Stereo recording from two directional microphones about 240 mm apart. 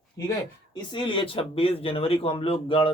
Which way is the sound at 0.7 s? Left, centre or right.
Centre.